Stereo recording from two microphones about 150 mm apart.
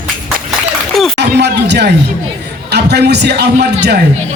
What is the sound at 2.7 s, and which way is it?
A man's voice, 90° right.